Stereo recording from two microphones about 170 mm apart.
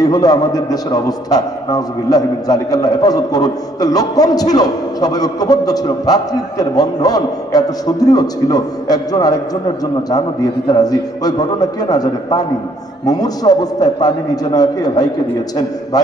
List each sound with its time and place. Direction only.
0.0 s a man's voice: 20° left (ahead or behind)